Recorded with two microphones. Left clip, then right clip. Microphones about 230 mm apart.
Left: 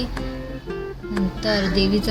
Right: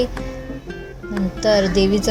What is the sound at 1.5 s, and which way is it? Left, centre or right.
Speech, centre.